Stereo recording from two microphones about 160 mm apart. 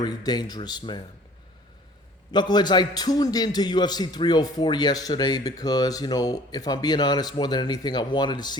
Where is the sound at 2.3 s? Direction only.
25° left (ahead or behind).